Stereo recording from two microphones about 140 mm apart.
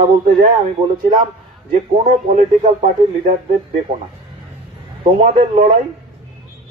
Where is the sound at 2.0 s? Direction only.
55° right (ahead or behind).